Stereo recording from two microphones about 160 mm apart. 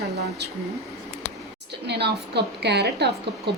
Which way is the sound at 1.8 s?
90° right.